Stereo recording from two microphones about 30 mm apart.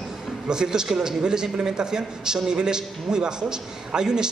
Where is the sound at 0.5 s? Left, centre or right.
Right.